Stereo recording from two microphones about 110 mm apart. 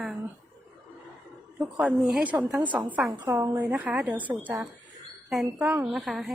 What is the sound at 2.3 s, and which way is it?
A woman's voice, 15° right (ahead or behind).